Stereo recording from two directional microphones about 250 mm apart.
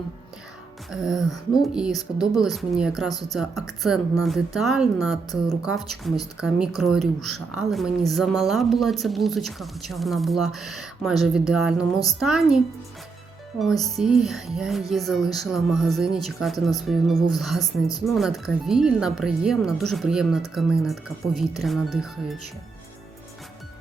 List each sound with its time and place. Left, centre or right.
0.9 s speech: centre
3.1 s a woman's voice: centre
3.3 s speech: centre
13.8 s speech: centre
17.6 s a woman's voice: centre
18.0 s speech: centre